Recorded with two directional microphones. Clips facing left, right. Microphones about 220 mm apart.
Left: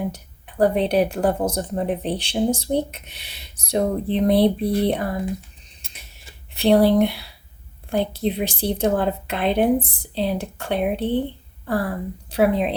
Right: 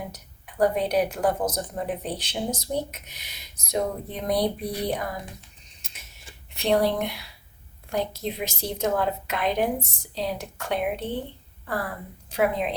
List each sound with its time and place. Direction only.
0.6 s speech: 30° left (ahead or behind)
6.6 s a woman's voice: 35° left (ahead or behind)